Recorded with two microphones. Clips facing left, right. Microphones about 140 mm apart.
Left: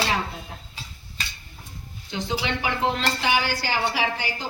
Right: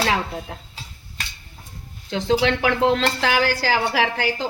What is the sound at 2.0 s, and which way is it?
A woman's voice, 90° right.